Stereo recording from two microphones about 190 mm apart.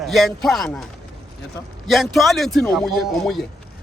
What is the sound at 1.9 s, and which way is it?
Speech, centre (ahead or behind).